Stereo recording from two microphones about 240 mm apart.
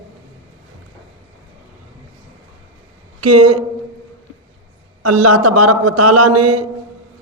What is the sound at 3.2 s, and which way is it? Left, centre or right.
Speech, right.